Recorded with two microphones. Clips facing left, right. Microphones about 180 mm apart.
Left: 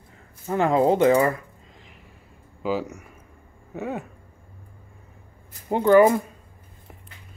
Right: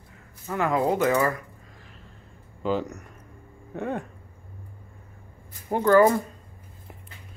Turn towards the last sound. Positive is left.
turn(degrees=15)  # may be behind; listen again after turning